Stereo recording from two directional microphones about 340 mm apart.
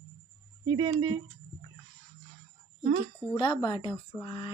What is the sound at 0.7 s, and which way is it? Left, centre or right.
Speech, centre.